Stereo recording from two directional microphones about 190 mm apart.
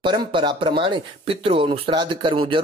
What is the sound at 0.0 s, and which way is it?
Speech, 25° right (ahead or behind).